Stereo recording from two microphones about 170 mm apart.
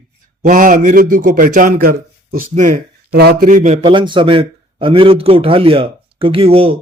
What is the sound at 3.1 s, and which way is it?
Speech, 70° right (ahead or behind).